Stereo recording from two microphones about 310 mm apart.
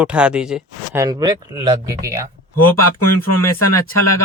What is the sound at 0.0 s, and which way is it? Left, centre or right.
Speech, centre.